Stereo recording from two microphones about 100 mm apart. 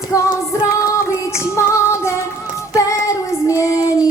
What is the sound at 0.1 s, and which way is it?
Music, 35° left (ahead or behind).